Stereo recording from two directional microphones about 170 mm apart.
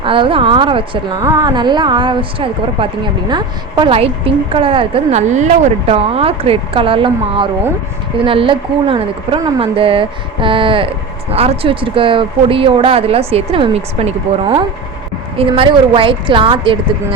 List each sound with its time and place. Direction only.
0.0 s a woman's voice: 30° right (ahead or behind)